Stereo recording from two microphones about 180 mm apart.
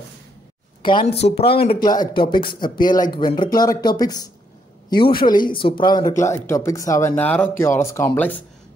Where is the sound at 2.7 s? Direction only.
50° left (ahead or behind).